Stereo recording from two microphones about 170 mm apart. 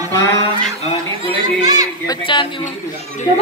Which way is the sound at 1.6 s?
25° right (ahead or behind).